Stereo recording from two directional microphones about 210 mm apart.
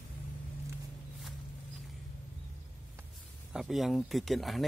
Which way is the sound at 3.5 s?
Centre (ahead or behind).